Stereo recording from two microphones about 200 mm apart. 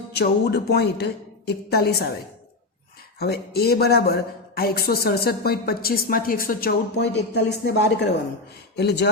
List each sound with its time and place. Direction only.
0.1 s speech: 55° left (ahead or behind)
3.2 s a woman's voice: 55° left (ahead or behind)